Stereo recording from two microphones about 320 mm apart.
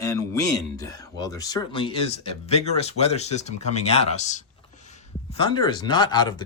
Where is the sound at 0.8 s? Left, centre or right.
Centre.